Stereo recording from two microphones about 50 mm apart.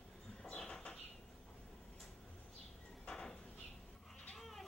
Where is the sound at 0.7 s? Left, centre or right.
Centre.